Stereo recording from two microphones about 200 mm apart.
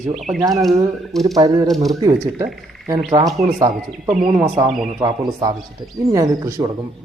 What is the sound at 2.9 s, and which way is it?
Speech, 15° right (ahead or behind).